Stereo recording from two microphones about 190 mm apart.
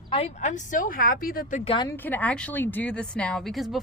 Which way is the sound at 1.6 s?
30° left (ahead or behind).